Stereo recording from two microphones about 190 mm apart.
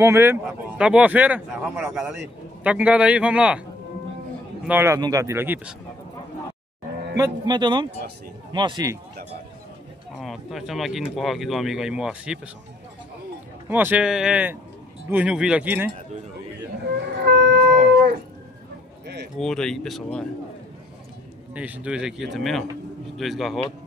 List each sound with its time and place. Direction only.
0.0 s speech: 15° right (ahead or behind)
4.6 s speech: 10° right (ahead or behind)
7.2 s a man's voice: 25° right (ahead or behind)
10.2 s speech: centre (ahead or behind)
13.7 s speech: 10° right (ahead or behind)
17.2 s shofar: 65° right (ahead or behind)
19.3 s speech: 5° left (ahead or behind)
21.5 s speech: 5° right (ahead or behind)